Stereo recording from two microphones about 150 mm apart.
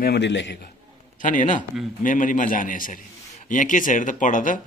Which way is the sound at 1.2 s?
60° left (ahead or behind).